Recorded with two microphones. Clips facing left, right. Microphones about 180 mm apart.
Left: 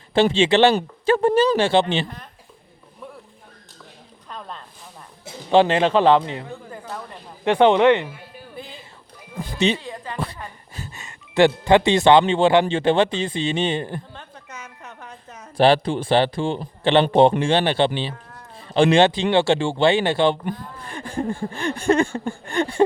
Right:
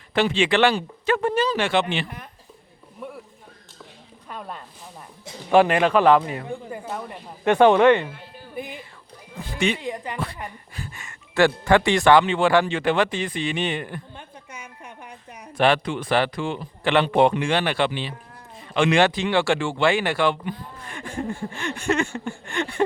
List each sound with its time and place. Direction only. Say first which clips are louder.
0.1 s speech: left 4 dB; 30° left (ahead or behind)
3.0 s a sound: right 3 dB; 5° right (ahead or behind)
4.3 s speech: right 1 dB; 10° right (ahead or behind)
5.5 s speech: left 1 dB; 25° left (ahead or behind)
6.5 s speech: right 3 dB; 15° right (ahead or behind)
7.4 s speech: even; 20° left (ahead or behind)
8.5 s music: right 5 dB; 15° right (ahead or behind)
9.6 s speech: left 3 dB; 25° left (ahead or behind)
9.8 s speech: right 3 dB; 15° right (ahead or behind)
10.8 s speech: left 2 dB; 25° left (ahead or behind)
14.1 s a sound: left 1 dB; 10° right (ahead or behind)
15.5 s speech: left 4 dB; 30° left (ahead or behind)
20.8 s a sound: left 4 dB; 30° left (ahead or behind)